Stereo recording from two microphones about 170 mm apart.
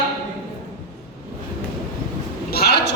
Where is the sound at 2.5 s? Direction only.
70° left (ahead or behind).